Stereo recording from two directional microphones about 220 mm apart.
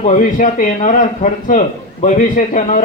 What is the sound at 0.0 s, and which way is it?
A man's voice, 35° left (ahead or behind).